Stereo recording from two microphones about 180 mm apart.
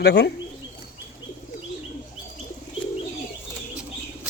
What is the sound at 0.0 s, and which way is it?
Speech, 65° left (ahead or behind).